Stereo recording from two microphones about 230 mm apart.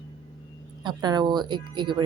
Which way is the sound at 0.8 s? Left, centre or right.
Centre.